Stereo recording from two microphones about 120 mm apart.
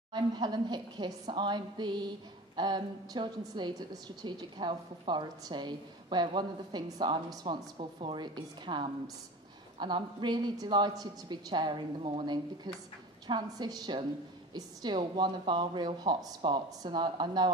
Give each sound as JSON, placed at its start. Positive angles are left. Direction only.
{"t": 0.1, "sound": "a woman's voice", "side_deg": -35}